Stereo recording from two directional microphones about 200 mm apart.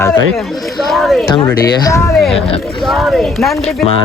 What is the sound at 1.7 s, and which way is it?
Speech, 15° left (ahead or behind).